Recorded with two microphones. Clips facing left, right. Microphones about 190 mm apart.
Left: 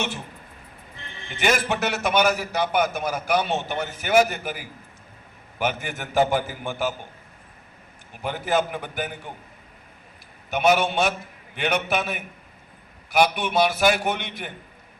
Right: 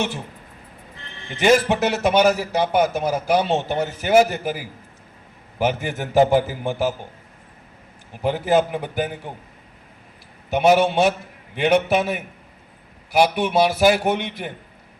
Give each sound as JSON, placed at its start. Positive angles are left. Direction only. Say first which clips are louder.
{"t": 1.3, "sound": "a man's voice", "louder": "right 7 dB", "side_deg": -30}
{"t": 8.2, "sound": "a man's voice", "louder": "right 5 dB", "side_deg": -30}
{"t": 10.5, "sound": "a man's voice", "louder": "right 4 dB", "side_deg": -30}